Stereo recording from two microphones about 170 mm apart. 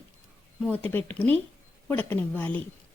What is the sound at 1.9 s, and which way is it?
Speech, 10° left (ahead or behind).